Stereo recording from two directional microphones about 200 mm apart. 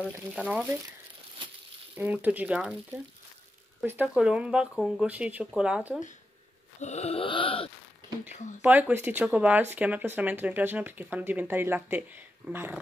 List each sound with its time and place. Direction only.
0.4 s speech: 10° right (ahead or behind)
2.0 s speech: 10° right (ahead or behind)
3.8 s speech: 10° right (ahead or behind)
6.8 s a sound: 35° left (ahead or behind)
8.3 s speech: 35° left (ahead or behind)
8.6 s speech: 10° right (ahead or behind)